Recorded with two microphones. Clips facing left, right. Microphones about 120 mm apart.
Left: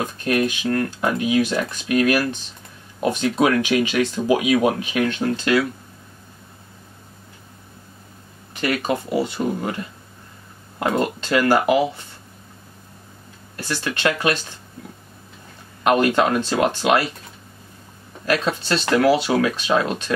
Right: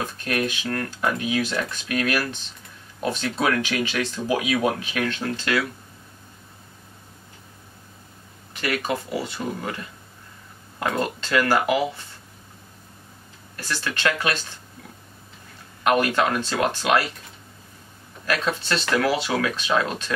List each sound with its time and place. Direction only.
0.0 s speech: 25° left (ahead or behind)
8.5 s speech: 25° left (ahead or behind)
11.5 s speech: 30° left (ahead or behind)
13.6 s speech: 20° left (ahead or behind)
15.8 s speech: 25° left (ahead or behind)
18.2 s speech: 25° left (ahead or behind)